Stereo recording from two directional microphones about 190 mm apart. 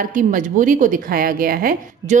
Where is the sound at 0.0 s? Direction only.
45° right (ahead or behind).